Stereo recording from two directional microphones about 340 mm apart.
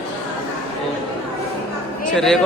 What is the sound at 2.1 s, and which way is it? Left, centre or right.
Speech, centre.